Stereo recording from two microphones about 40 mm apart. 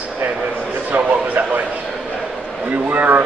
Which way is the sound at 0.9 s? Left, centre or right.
Right.